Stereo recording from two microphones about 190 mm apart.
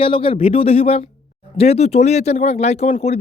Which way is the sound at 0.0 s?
30° left (ahead or behind).